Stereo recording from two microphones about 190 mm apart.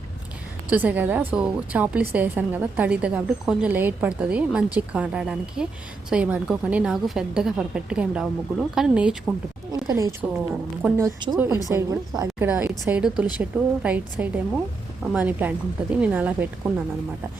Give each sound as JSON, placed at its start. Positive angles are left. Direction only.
{"t": 0.7, "sound": "a woman's voice", "side_deg": -10}
{"t": 9.9, "sound": "a woman's voice", "side_deg": -15}